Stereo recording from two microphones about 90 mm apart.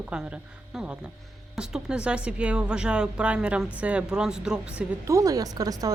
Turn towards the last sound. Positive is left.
turn(degrees=-45)  # may be behind; listen again after turning